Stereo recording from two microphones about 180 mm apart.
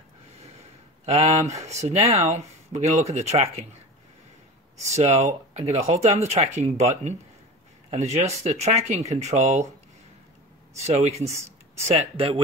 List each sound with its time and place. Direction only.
1.0 s speech: 35° right (ahead or behind)
4.9 s speech: 40° right (ahead or behind)
10.9 s speech: 35° right (ahead or behind)